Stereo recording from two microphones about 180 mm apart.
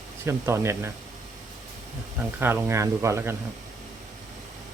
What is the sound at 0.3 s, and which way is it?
Speech, 15° right (ahead or behind).